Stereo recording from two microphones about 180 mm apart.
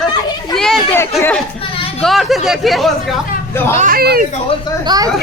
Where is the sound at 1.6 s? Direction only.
30° left (ahead or behind).